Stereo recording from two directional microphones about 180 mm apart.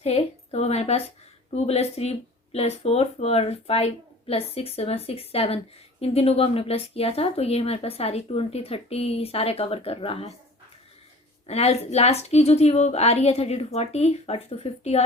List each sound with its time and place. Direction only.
0.0 s a woman's voice: 35° left (ahead or behind)
11.4 s speech: 35° left (ahead or behind)